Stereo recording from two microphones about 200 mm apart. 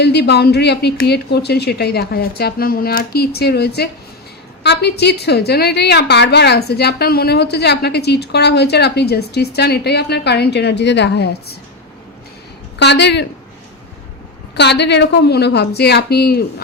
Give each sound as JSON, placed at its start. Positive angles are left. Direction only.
{"t": 0.0, "sound": "a woman's voice", "side_deg": 55}
{"t": 12.8, "sound": "a woman's voice", "side_deg": 60}
{"t": 14.5, "sound": "a woman's voice", "side_deg": 60}